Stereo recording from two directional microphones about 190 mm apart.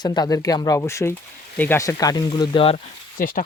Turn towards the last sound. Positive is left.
turn(degrees=45)  # may be behind; listen again after turning